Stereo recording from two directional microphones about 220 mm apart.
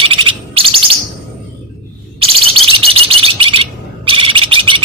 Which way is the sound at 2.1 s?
25° right (ahead or behind).